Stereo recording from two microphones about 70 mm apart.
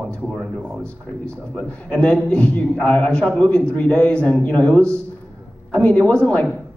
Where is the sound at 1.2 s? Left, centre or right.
Centre.